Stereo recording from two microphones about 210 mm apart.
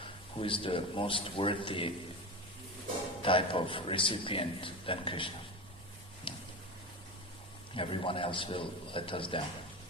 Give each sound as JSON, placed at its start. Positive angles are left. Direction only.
{"t": 0.3, "sound": "a man's voice", "side_deg": 25}
{"t": 3.2, "sound": "a man's voice", "side_deg": 25}
{"t": 6.3, "sound": "a sound", "side_deg": 25}
{"t": 7.8, "sound": "a man's voice", "side_deg": 25}